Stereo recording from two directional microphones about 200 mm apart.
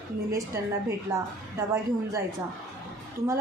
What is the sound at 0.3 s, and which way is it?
Speech, 15° right (ahead or behind).